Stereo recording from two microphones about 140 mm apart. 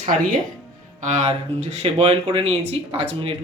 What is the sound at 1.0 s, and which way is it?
Speech, 55° right (ahead or behind).